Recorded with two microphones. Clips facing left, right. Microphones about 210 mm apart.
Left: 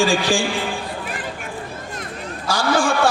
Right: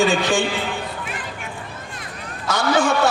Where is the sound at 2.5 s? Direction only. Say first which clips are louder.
Right 1 dB; 20° right (ahead or behind).